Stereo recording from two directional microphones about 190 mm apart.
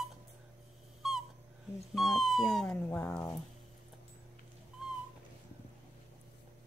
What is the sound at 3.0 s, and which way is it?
Speech, 15° left (ahead or behind).